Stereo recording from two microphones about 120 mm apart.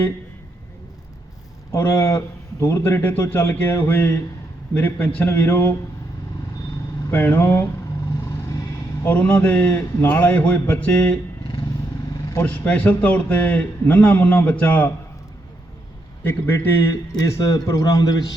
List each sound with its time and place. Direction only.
1.7 s a man's voice: 20° left (ahead or behind)
7.1 s a man's voice: 20° left (ahead or behind)
9.0 s a man's voice: 15° left (ahead or behind)
12.3 s a man's voice: 15° left (ahead or behind)
16.2 s a man's voice: 20° left (ahead or behind)